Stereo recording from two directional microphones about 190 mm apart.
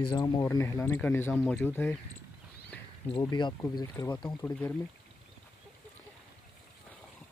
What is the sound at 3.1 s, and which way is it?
Speech, 25° left (ahead or behind).